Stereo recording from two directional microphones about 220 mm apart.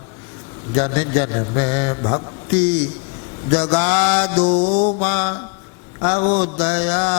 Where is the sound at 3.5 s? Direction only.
20° left (ahead or behind).